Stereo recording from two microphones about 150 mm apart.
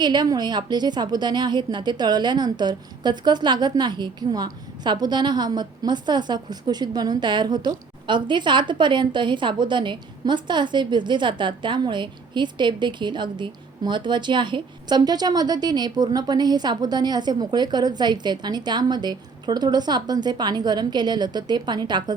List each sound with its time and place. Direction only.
0.0 s a woman's voice: 30° right (ahead or behind)